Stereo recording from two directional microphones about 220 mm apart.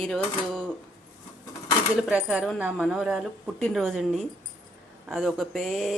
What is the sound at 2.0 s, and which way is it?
Speech, 5° right (ahead or behind).